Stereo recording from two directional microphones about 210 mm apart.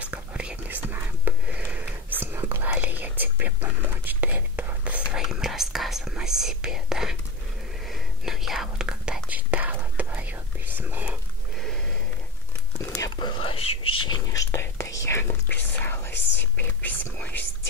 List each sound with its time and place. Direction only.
0.0 s whispering: 5° right (ahead or behind)
12.8 s whispering: 15° left (ahead or behind)
13.6 s whispering: 90° left
14.1 s whispering: 15° left (ahead or behind)